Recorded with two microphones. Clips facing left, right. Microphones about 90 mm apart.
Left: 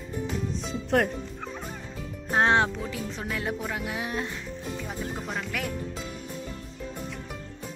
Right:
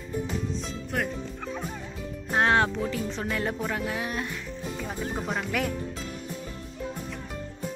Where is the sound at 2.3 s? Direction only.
25° left (ahead or behind).